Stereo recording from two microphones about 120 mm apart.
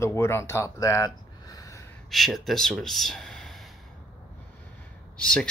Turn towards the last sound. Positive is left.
turn(degrees=5)  # may be behind; listen again after turning